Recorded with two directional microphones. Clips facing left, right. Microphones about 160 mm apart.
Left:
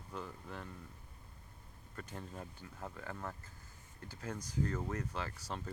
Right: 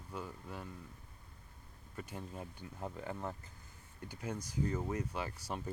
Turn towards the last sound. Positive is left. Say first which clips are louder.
# right 2 dB
turn(degrees=-10)  # may be behind; listen again after turning